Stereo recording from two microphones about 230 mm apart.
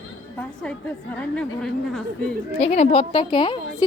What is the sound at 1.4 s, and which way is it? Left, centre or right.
Speech, centre.